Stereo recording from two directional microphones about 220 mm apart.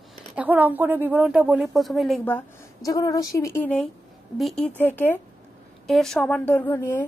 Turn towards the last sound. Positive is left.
turn(degrees=10)  # may be behind; listen again after turning